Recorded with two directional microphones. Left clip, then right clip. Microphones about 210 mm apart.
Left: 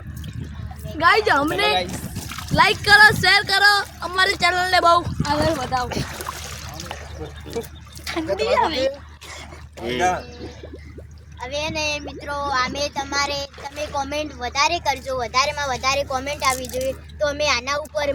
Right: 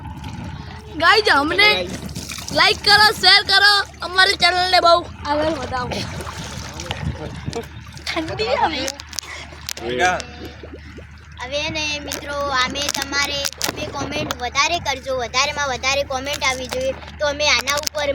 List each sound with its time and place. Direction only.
0.9 s a woman's voice: 30° right (ahead or behind)
2.6 s speech: centre (ahead or behind)
5.3 s speech: 10° left (ahead or behind)
8.0 s speech: 30° right (ahead or behind)
11.3 s speech: centre (ahead or behind)